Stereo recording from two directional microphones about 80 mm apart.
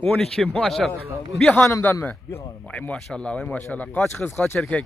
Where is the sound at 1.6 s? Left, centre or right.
Left.